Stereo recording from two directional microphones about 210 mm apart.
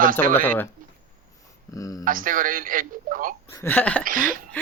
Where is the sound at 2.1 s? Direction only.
40° right (ahead or behind).